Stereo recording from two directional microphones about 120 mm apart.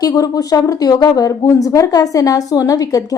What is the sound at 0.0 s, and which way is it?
A woman's voice, 30° left (ahead or behind).